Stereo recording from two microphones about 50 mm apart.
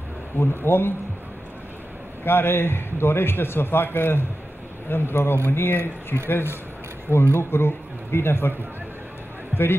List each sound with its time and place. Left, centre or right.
0.3 s a man's voice: left
2.2 s a man's voice: left